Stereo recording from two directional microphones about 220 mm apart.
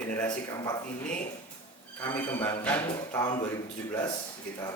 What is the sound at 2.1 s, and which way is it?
Speech, 10° left (ahead or behind).